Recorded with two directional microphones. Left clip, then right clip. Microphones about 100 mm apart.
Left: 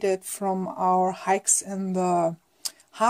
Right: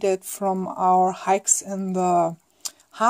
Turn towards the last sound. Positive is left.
turn(degrees=-30)  # may be behind; listen again after turning